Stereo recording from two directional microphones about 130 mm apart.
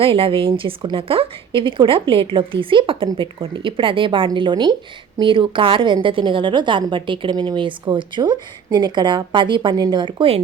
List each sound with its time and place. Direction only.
0.0 s a woman's voice: 45° right (ahead or behind)